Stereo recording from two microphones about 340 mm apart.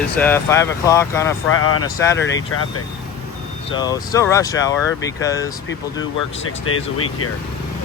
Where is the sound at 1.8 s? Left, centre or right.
Centre.